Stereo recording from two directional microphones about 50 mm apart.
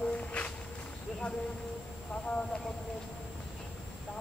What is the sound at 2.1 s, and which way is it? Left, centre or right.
Speech, left.